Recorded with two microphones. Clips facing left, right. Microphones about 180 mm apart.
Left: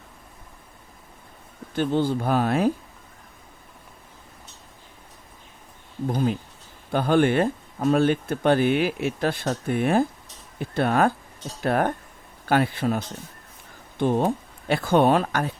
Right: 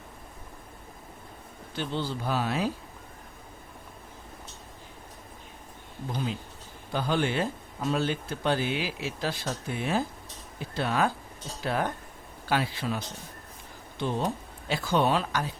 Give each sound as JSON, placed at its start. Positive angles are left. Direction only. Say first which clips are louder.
{"t": 1.7, "sound": "speech", "louder": "left 9 dB", "side_deg": 50}
{"t": 6.1, "sound": "speech", "louder": "left 8 dB", "side_deg": 50}
{"t": 14.0, "sound": "speech", "louder": "left 8 dB", "side_deg": 50}